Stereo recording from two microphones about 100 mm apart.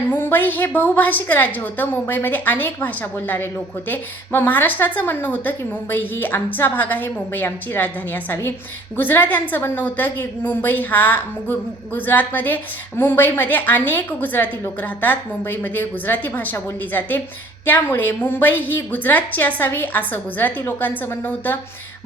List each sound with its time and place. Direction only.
0.1 s a woman's voice: 20° left (ahead or behind)